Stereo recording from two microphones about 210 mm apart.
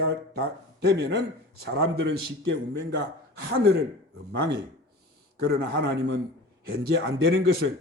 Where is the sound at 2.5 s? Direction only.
55° right (ahead or behind).